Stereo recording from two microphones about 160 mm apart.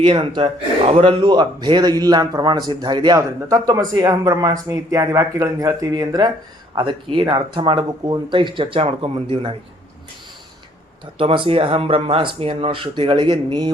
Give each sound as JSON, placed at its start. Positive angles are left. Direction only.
{"t": 0.0, "sound": "a man's voice", "side_deg": -30}
{"t": 11.2, "sound": "speech", "side_deg": -35}